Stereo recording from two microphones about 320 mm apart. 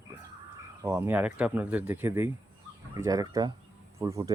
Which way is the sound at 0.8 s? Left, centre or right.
Centre.